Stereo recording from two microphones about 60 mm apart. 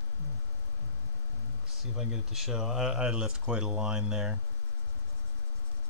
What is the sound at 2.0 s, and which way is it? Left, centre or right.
Speech, centre.